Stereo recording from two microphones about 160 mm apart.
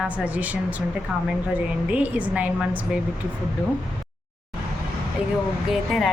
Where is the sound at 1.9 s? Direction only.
10° right (ahead or behind).